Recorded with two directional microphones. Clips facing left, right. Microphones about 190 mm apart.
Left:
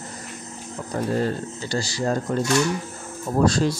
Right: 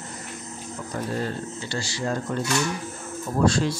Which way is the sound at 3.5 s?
40° left (ahead or behind).